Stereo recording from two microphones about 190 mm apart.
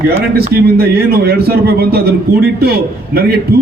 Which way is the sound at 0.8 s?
55° right (ahead or behind).